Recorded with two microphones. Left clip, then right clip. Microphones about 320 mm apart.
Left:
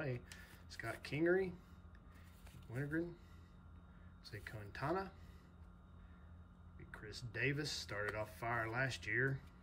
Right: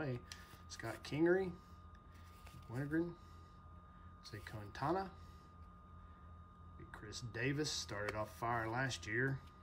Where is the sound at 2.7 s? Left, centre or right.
Centre.